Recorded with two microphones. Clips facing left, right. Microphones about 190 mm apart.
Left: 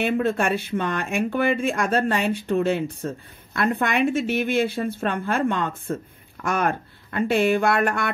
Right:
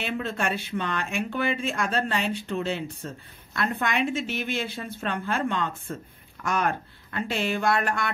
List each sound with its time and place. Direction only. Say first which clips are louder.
0.0 s speech: left 7 dB; 55° left (ahead or behind)